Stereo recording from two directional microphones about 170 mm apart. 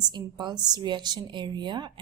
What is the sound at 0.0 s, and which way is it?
A woman's voice, 25° right (ahead or behind).